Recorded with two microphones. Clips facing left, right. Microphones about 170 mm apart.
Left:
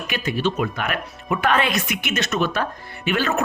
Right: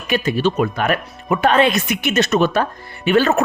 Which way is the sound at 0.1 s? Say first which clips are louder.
Right 6 dB; 35° right (ahead or behind).